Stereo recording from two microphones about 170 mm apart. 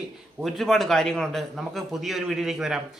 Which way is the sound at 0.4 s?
Centre (ahead or behind).